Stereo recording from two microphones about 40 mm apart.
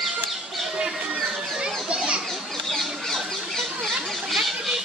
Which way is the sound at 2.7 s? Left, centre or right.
Centre.